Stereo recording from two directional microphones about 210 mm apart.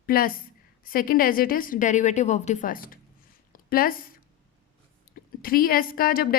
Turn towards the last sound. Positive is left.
turn(degrees=45)  # may be behind; listen again after turning